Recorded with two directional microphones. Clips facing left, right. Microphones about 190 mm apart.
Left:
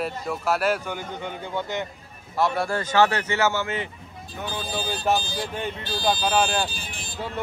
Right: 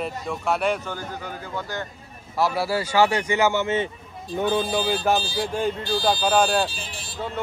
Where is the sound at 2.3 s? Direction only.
5° right (ahead or behind); by 3.8 s 20° right (ahead or behind).